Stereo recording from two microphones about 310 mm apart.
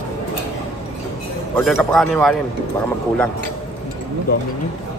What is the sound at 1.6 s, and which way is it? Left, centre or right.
Speech, centre.